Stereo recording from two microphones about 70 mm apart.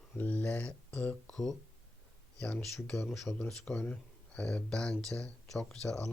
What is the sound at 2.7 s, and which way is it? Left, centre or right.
Speech, centre.